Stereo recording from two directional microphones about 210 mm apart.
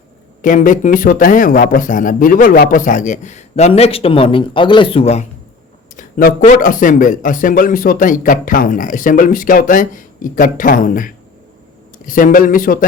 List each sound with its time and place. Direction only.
0.4 s a man's voice: 40° left (ahead or behind)
6.0 s a man's voice: 40° left (ahead or behind)